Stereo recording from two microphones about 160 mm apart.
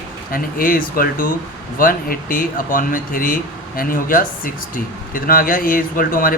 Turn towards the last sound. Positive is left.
turn(degrees=60)  # may be behind; listen again after turning